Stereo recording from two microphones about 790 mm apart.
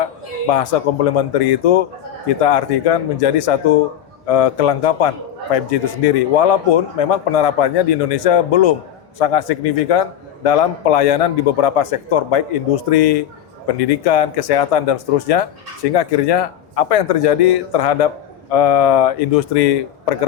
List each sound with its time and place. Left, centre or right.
0.5 s a man's voice: left